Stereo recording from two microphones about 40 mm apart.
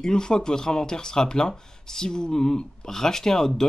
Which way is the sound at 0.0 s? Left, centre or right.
Centre.